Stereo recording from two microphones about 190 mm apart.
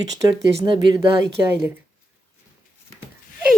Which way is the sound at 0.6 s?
25° right (ahead or behind).